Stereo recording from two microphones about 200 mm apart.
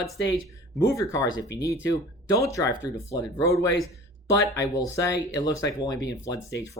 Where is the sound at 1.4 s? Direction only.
60° left (ahead or behind).